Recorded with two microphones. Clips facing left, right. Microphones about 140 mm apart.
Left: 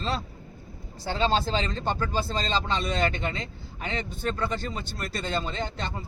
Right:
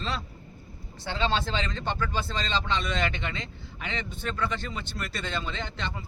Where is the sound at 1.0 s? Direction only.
35° left (ahead or behind).